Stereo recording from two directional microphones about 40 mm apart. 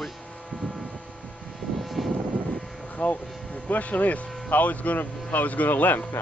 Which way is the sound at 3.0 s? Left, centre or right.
Left.